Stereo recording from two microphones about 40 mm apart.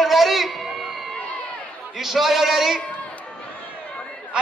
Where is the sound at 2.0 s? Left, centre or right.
Centre.